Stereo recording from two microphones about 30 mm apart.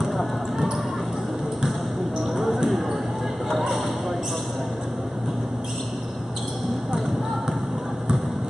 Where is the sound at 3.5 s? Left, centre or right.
Centre.